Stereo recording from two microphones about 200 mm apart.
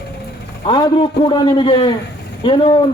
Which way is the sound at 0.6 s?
25° left (ahead or behind).